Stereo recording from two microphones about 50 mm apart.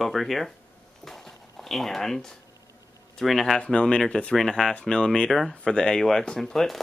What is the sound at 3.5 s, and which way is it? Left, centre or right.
Speech, centre.